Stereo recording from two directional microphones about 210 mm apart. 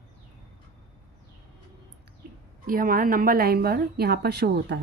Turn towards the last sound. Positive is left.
turn(degrees=-50)  # may be behind; listen again after turning